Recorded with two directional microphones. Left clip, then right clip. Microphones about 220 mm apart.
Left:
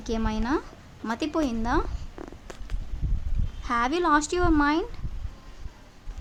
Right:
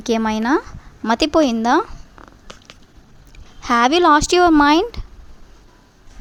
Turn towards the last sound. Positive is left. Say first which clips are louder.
# right 10 dB
turn(degrees=-45)  # may be behind; listen again after turning